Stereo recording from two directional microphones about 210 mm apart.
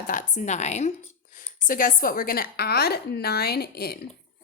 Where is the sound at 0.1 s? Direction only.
35° left (ahead or behind).